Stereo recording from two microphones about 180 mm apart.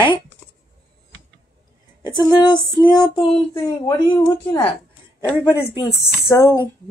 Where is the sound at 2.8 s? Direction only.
30° left (ahead or behind).